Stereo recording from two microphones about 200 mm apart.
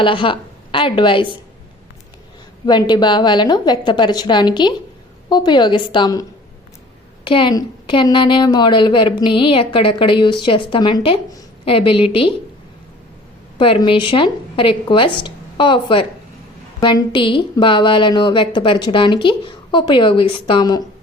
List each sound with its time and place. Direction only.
0.0 s a woman's voice: 25° left (ahead or behind)
2.6 s a woman's voice: 20° left (ahead or behind)
7.3 s a woman's voice: 25° left (ahead or behind)
13.6 s a woman's voice: 25° left (ahead or behind)